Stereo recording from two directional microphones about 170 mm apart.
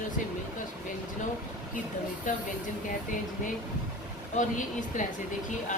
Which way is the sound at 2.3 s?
50° left (ahead or behind).